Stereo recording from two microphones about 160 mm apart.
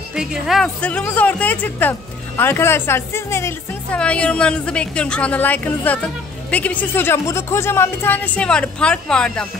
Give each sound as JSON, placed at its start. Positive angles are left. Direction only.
{"t": 0.1, "sound": "a woman's voice", "side_deg": -5}
{"t": 0.7, "sound": "speech", "side_deg": 10}